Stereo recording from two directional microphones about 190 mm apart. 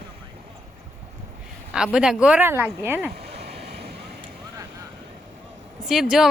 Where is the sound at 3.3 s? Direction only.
60° right (ahead or behind).